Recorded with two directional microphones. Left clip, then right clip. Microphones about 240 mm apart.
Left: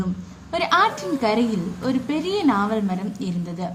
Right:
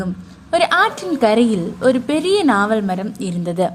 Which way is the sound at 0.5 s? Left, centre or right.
Right.